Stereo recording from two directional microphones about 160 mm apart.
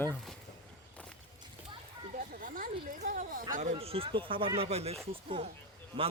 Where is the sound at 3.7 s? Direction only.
35° right (ahead or behind).